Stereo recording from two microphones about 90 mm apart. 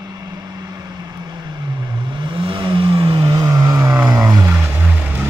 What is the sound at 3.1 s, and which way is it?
Vehicle, 45° right (ahead or behind).